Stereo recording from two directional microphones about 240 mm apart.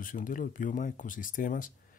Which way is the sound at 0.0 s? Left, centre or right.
Left.